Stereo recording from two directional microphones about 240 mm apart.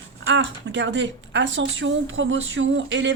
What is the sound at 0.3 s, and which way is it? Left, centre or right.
Speech, right.